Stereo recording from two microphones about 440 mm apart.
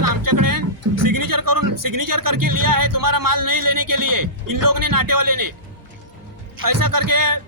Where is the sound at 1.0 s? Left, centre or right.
Right.